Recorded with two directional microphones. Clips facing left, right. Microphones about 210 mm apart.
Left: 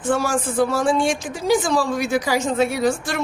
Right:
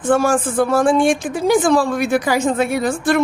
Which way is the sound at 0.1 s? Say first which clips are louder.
Right 5 dB; 55° right (ahead or behind).